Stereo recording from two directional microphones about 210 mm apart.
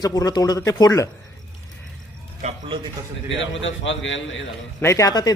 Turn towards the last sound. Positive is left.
turn(degrees=20)  # may be behind; listen again after turning